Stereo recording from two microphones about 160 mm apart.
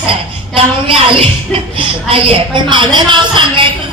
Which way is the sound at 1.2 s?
35° right (ahead or behind).